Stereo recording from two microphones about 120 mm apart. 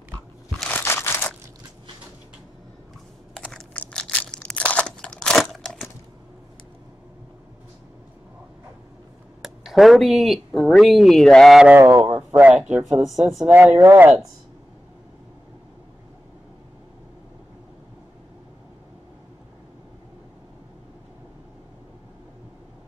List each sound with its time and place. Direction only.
0.7 s crumpling: 20° left (ahead or behind)
3.3 s a sound: 5° left (ahead or behind)
9.4 s speech: centre (ahead or behind)
11.8 s a man's voice: 25° right (ahead or behind)
12.1 s a sound: 20° right (ahead or behind)
12.7 s speech: 5° right (ahead or behind)
13.5 s speech: 15° right (ahead or behind)